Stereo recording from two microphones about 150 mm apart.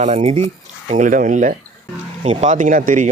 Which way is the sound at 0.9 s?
60° right (ahead or behind).